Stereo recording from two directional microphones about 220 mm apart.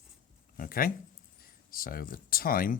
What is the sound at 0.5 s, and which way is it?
Speech, 40° left (ahead or behind).